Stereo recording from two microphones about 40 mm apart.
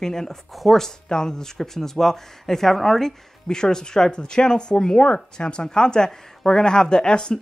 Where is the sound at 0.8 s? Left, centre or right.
Centre.